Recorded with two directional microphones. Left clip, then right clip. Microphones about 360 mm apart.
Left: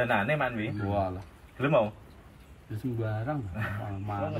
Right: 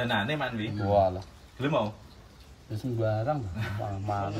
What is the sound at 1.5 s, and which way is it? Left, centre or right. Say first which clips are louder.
Speech: left 3 dB; centre.